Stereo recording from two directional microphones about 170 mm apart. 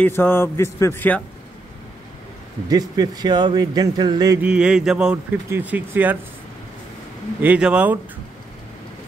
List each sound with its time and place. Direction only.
0.0 s speech: 10° left (ahead or behind)
2.7 s speech: 25° right (ahead or behind)
4.4 s speech: 5° right (ahead or behind)
7.4 s speech: 5° right (ahead or behind)